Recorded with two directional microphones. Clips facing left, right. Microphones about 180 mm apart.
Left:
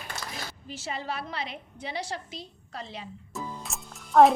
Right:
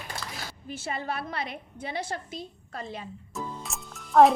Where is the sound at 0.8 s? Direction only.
55° right (ahead or behind).